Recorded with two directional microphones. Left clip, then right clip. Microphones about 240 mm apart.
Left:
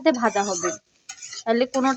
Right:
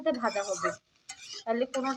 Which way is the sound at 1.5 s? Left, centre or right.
Left.